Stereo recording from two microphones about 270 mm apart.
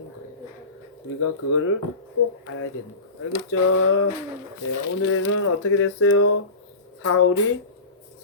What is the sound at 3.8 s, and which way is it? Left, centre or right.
Speech, left.